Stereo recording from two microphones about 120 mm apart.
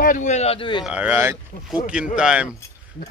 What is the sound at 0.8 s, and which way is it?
Speech, 10° right (ahead or behind).